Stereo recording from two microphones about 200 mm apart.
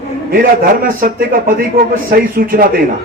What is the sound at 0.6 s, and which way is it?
Speech, 45° right (ahead or behind).